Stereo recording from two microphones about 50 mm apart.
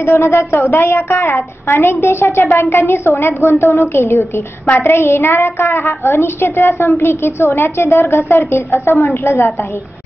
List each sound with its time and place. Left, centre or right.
0.0 s a woman's voice: left
4.6 s a woman's voice: left
4.9 s a child's voice: left